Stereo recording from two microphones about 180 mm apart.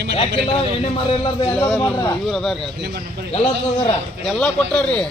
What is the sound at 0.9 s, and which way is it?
Speech, 30° left (ahead or behind).